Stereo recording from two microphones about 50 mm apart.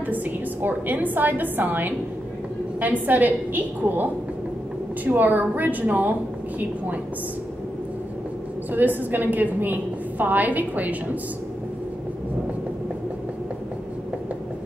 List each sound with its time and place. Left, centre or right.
0.0 s a woman's voice: right
8.7 s a woman's voice: right